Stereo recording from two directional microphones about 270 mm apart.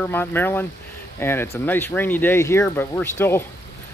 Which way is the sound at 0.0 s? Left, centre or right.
Centre.